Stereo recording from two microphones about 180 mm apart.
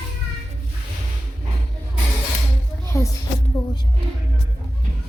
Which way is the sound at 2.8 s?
15° left (ahead or behind).